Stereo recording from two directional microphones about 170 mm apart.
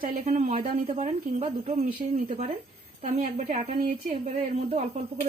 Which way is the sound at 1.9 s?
55° right (ahead or behind).